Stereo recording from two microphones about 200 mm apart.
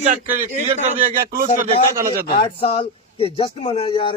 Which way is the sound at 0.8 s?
40° right (ahead or behind).